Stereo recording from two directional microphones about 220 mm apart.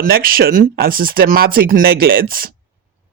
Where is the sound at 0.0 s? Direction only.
40° right (ahead or behind).